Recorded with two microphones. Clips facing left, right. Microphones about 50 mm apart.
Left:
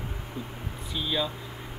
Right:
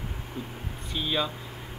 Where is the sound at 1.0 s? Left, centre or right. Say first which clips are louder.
Right 1 dB; right.